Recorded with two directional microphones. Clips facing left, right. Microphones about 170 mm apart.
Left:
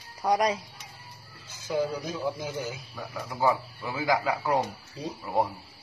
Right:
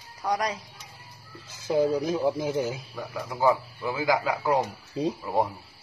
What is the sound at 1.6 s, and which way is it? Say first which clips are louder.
Speech: right 5 dB; 20° right (ahead or behind).